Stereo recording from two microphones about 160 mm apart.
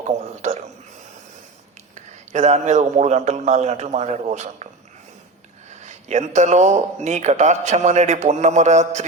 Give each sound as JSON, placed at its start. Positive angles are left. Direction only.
{"t": 2.0, "sound": "speech", "side_deg": -45}
{"t": 5.8, "sound": "speech", "side_deg": -45}